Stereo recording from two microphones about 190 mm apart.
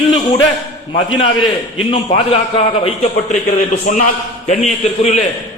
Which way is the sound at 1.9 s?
30° left (ahead or behind).